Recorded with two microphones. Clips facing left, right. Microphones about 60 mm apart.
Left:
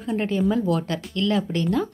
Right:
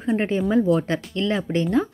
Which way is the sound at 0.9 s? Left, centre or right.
Right.